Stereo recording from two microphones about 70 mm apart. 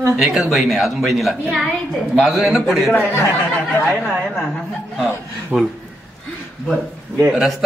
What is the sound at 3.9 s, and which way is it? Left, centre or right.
Speech, centre.